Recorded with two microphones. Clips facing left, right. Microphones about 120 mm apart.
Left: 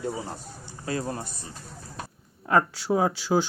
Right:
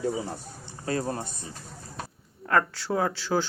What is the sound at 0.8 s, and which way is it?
Speech, 35° right (ahead or behind).